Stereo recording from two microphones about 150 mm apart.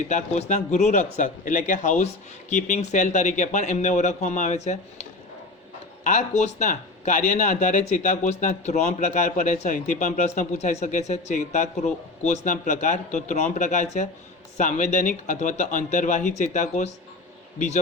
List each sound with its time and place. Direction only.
0.1 s speech: 50° left (ahead or behind)
6.1 s speech: 50° left (ahead or behind)